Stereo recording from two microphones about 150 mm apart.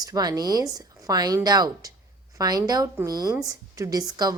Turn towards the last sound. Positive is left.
turn(degrees=-25)  # may be behind; listen again after turning